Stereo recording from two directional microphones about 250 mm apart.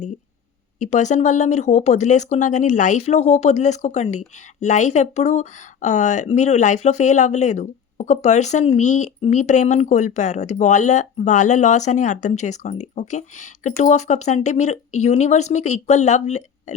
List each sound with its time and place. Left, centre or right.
0.8 s speech: left